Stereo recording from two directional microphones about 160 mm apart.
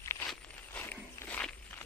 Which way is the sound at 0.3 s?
10° left (ahead or behind).